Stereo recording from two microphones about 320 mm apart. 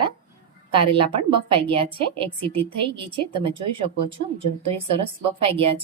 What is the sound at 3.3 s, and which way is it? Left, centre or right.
Speech, centre.